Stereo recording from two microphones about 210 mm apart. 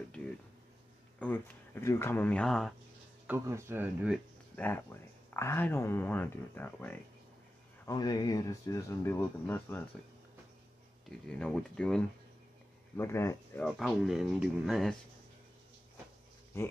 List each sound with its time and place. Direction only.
1.2 s speech: 10° left (ahead or behind)
3.3 s speech: 15° right (ahead or behind)
4.6 s speech: 10° left (ahead or behind)
11.1 s speech: 5° left (ahead or behind)
13.7 s speech: centre (ahead or behind)
16.5 s speech: 10° left (ahead or behind)